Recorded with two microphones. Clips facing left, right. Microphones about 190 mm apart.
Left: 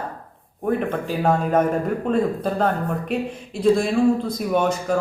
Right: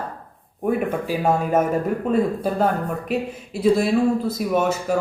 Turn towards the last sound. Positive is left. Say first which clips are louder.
# even
turn(degrees=-5)  # may be behind; listen again after turning